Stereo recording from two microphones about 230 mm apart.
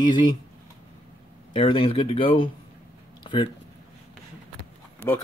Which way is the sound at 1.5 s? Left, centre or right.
Left.